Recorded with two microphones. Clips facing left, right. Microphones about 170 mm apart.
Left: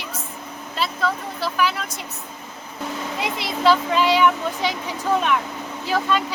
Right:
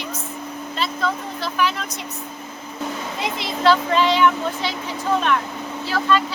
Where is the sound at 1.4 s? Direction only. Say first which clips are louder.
Left 1 dB; 5° left (ahead or behind).